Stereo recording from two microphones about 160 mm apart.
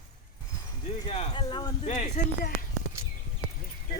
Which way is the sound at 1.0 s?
40° left (ahead or behind).